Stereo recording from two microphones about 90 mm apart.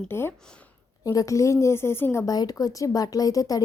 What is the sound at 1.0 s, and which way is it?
Speech, 40° left (ahead or behind).